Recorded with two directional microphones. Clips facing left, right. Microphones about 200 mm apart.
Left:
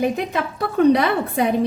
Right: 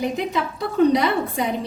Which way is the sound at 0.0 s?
55° left (ahead or behind).